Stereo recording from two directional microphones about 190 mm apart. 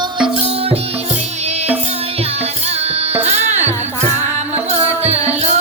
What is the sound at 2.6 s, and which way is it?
Music, 35° right (ahead or behind).